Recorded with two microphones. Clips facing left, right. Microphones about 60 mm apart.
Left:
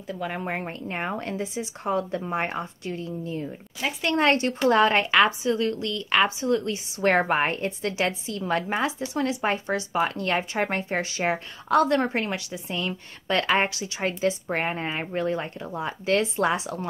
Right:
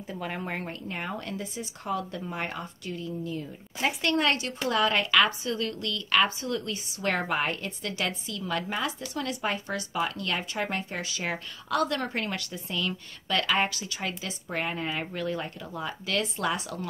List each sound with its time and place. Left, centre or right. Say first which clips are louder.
0.3 s speech: left 3 dB; centre
0.7 s speech: left 4 dB; left; by 12.7 s centre
12.7 s speech: left 1 dB; left
14.0 s speech: left 11 dB; left